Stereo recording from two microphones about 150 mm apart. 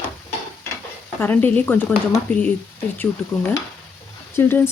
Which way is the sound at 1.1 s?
10° left (ahead or behind).